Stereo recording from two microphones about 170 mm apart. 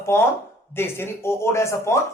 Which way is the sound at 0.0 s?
15° left (ahead or behind).